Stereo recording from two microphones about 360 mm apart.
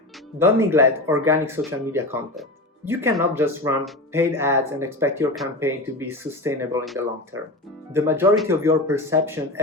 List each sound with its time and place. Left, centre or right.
0.6 s speech: centre